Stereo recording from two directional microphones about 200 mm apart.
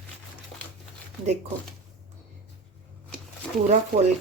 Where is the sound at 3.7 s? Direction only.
35° right (ahead or behind).